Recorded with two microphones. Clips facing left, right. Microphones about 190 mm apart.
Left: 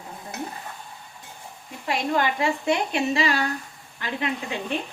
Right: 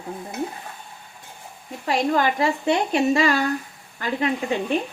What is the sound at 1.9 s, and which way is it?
A woman's voice, 40° right (ahead or behind).